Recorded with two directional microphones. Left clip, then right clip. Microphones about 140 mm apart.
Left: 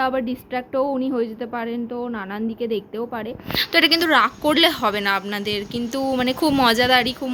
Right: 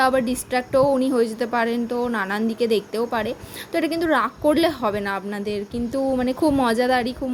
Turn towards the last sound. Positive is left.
turn(degrees=-25)  # may be behind; listen again after turning